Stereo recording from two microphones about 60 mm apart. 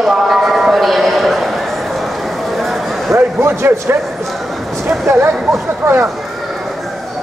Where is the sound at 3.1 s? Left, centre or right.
Right.